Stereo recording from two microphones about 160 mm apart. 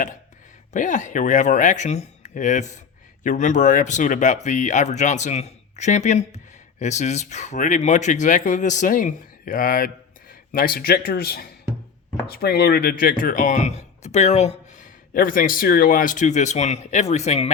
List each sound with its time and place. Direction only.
0.7 s speech: 50° left (ahead or behind)
15.1 s speech: 60° left (ahead or behind); by 17.5 s 45° left (ahead or behind)